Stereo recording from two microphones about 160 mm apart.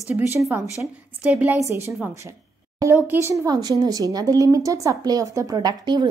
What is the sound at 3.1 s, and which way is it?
A woman's voice, 15° right (ahead or behind).